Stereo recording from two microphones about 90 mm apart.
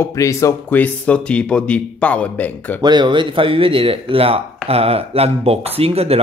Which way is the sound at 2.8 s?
55° right (ahead or behind).